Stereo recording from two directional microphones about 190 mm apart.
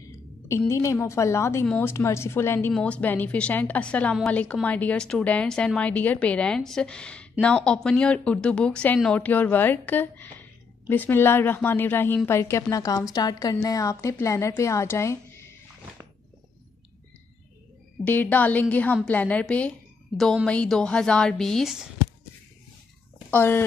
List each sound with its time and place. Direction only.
0.5 s a woman's voice: 15° left (ahead or behind)
18.0 s a woman's voice: 10° left (ahead or behind)
23.3 s a woman's voice: 10° left (ahead or behind)